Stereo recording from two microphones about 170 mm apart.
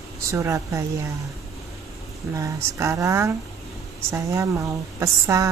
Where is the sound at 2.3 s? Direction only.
15° right (ahead or behind).